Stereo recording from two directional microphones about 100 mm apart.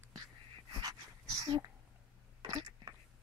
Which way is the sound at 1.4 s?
50° right (ahead or behind).